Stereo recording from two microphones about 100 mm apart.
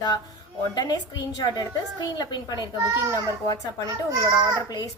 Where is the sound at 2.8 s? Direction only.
30° right (ahead or behind).